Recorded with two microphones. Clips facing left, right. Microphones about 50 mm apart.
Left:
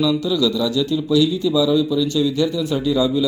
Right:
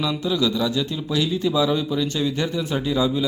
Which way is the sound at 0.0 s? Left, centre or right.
Right.